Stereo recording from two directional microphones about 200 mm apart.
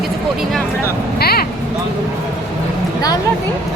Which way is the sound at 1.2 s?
50° left (ahead or behind).